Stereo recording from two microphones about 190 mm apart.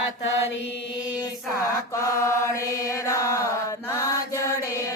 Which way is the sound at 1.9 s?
15° left (ahead or behind).